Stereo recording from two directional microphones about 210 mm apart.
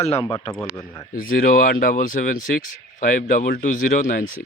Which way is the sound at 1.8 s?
40° left (ahead or behind).